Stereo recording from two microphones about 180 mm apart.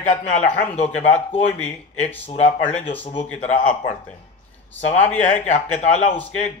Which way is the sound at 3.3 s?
45° left (ahead or behind).